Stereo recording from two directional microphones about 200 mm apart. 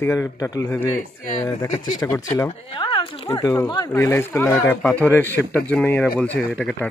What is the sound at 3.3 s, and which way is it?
Speech, 15° left (ahead or behind).